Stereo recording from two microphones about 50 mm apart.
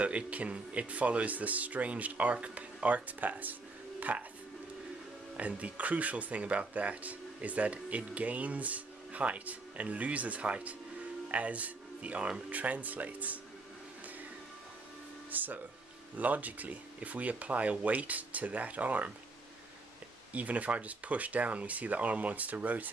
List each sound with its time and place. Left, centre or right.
0.0 s speech: right
5.4 s speech: right
15.3 s music: right
16.2 s speech: right
20.3 s speech: right